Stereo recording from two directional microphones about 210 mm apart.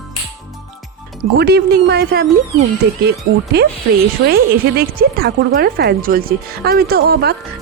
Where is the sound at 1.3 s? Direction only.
50° right (ahead or behind).